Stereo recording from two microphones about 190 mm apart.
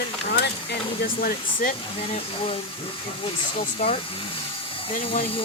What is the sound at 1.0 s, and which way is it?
Speech, 50° left (ahead or behind).